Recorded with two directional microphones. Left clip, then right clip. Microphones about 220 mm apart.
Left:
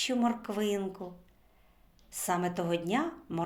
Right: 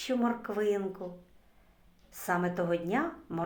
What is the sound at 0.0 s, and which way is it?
A woman's voice, 35° left (ahead or behind).